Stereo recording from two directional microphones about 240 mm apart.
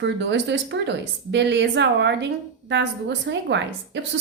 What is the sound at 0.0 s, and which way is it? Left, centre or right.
A woman's voice, right.